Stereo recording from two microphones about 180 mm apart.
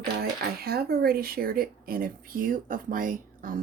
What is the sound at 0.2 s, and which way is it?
Speech, 60° right (ahead or behind).